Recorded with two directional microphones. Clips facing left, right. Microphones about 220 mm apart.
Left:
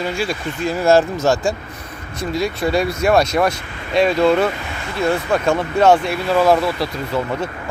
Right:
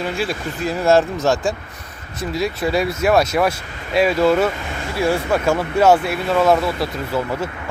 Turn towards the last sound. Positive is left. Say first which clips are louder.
# left 1 dB
turn(degrees=-5)  # may be behind; listen again after turning